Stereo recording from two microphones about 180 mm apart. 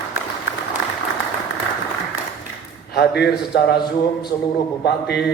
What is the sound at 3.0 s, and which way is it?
Speech, 65° left (ahead or behind).